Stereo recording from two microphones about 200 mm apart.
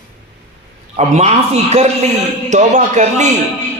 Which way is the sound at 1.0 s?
35° right (ahead or behind).